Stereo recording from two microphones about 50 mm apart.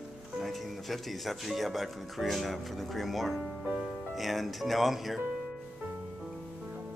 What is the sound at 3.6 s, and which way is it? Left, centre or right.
Music, right.